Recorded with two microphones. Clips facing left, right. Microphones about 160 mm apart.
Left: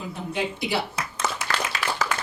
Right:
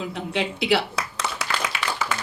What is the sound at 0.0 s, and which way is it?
Speech, 90° right.